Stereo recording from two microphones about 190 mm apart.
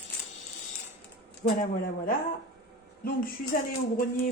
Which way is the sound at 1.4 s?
45° left (ahead or behind).